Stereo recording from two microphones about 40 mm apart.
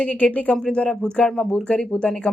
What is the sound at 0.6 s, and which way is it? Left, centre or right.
Speech, left.